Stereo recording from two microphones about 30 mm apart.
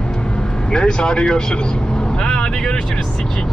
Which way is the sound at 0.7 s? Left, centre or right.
Left.